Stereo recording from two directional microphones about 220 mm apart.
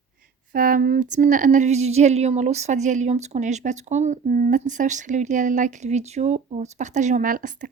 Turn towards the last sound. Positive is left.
turn(degrees=-35)  # may be behind; listen again after turning